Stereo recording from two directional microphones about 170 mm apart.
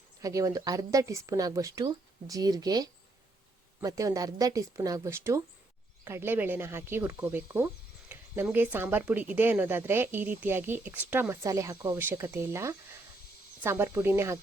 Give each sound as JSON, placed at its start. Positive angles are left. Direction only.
{"t": 0.2, "sound": "speech", "side_deg": -20}